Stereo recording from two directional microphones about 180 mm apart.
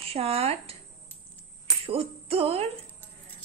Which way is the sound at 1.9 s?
35° right (ahead or behind).